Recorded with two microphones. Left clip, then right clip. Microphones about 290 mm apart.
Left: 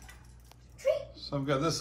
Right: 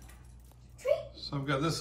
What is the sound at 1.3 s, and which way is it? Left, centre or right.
Speech, centre.